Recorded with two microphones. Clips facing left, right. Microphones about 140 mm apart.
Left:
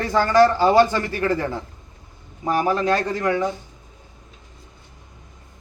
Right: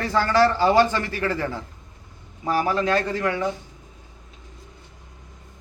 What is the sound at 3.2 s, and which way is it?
Speech, 35° left (ahead or behind).